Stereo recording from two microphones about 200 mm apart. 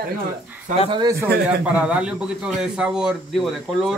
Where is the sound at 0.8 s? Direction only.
25° right (ahead or behind).